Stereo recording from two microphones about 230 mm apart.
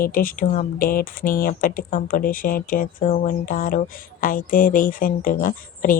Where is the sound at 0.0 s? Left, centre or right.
Left.